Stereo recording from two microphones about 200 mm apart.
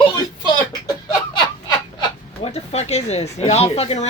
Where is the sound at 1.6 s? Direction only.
20° left (ahead or behind).